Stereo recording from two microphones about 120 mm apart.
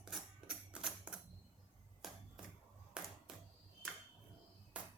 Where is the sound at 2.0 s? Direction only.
Centre (ahead or behind).